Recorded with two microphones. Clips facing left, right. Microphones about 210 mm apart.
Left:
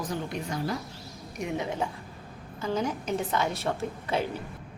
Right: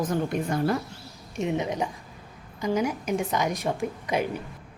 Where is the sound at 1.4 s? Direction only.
20° right (ahead or behind).